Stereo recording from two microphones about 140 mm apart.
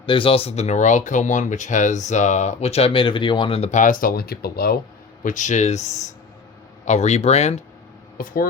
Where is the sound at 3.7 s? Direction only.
75° left (ahead or behind); by 4.7 s 90° left.